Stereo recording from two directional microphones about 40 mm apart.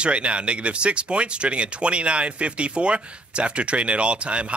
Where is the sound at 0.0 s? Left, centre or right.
Right.